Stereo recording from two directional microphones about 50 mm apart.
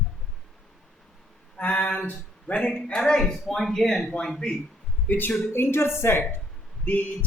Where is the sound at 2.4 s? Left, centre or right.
Left.